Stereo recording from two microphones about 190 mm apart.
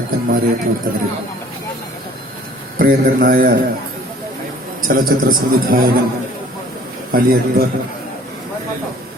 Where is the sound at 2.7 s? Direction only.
45° right (ahead or behind).